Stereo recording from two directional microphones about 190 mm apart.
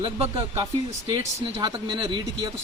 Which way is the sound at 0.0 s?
30° right (ahead or behind).